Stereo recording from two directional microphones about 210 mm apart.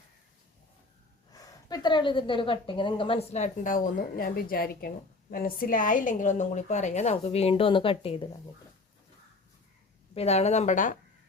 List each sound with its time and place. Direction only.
1.3 s a woman's voice: 15° left (ahead or behind)
10.2 s a woman's voice: 30° left (ahead or behind)